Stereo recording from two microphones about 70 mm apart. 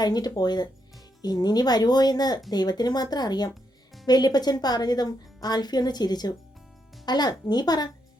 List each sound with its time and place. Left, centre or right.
0.0 s a woman's voice: left